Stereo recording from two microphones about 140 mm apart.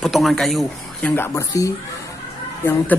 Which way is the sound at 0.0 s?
Centre (ahead or behind).